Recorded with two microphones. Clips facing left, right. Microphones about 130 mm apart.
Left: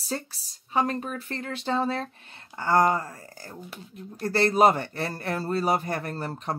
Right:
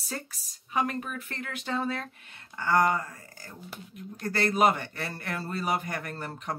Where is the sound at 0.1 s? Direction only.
30° left (ahead or behind).